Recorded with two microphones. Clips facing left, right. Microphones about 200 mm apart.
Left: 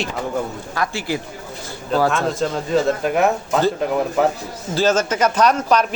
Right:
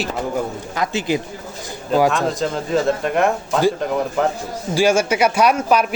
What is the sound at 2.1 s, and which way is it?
A man's voice, centre (ahead or behind).